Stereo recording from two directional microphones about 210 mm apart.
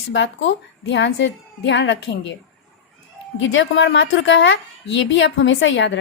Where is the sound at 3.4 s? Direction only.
60° left (ahead or behind).